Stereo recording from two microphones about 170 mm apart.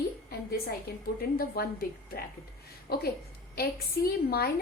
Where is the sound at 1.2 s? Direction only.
60° left (ahead or behind).